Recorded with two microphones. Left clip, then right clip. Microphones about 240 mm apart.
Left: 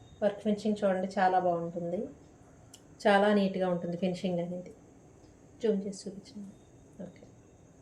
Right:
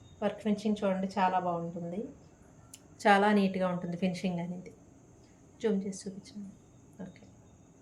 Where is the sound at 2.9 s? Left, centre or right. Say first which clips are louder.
Even; right.